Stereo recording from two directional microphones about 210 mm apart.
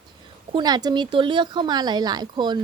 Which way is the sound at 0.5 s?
20° right (ahead or behind).